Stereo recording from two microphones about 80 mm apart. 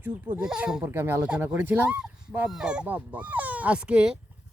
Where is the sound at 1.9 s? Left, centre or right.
Centre.